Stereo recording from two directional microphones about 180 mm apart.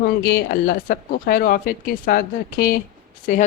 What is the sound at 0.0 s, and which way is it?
Speech, 60° left (ahead or behind).